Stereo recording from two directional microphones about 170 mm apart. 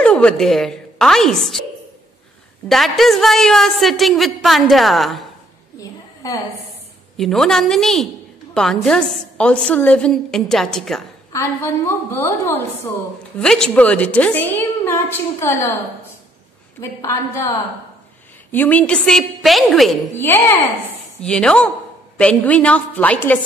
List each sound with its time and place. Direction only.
0.0 s a woman's voice: 5° left (ahead or behind)
2.7 s a woman's voice: centre (ahead or behind)
5.8 s a sound: 20° left (ahead or behind)
7.2 s a woman's voice: centre (ahead or behind)
11.3 s a woman's voice: 15° left (ahead or behind)
16.8 s a woman's voice: 15° left (ahead or behind)
18.5 s a woman's voice: 10° left (ahead or behind)
20.2 s a woman's voice: 15° left (ahead or behind)